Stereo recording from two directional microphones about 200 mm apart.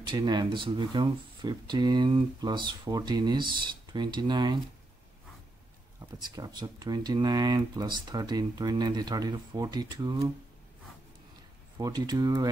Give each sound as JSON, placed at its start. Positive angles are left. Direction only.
{"t": 0.0, "sound": "speech", "side_deg": -20}
{"t": 6.2, "sound": "speech", "side_deg": -20}
{"t": 11.8, "sound": "speech", "side_deg": -20}